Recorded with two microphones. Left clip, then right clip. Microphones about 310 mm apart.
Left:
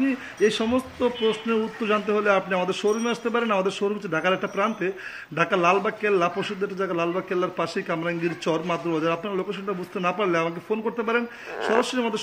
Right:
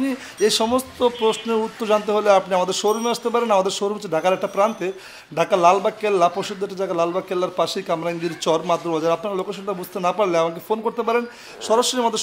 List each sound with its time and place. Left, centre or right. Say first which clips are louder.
0.4 s speech: right 4 dB; centre